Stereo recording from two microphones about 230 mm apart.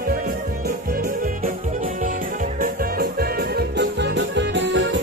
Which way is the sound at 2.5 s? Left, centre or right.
Right.